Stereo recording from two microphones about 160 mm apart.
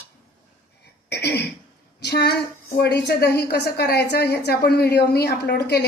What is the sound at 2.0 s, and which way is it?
A woman's voice, 90° left.